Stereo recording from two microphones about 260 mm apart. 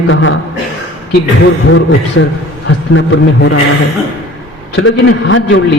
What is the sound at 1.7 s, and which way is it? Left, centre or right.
A man's voice, left.